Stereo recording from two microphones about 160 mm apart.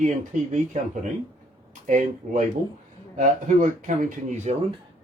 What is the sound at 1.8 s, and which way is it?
Speech, 50° right (ahead or behind).